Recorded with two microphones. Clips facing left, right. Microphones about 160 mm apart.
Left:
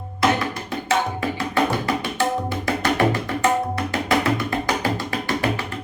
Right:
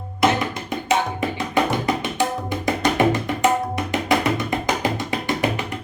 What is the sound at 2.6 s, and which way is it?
Music, 20° right (ahead or behind).